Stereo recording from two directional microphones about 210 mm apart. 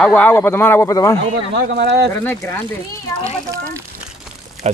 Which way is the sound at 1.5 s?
55° right (ahead or behind).